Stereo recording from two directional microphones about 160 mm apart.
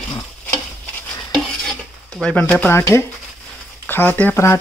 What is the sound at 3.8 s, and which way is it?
Speech, 10° left (ahead or behind).